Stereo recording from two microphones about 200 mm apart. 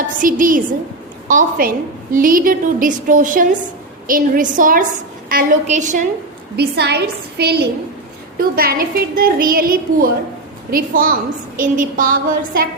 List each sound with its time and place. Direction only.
0.2 s a woman's voice: 45° right (ahead or behind)
6.6 s a woman's voice: 55° right (ahead or behind)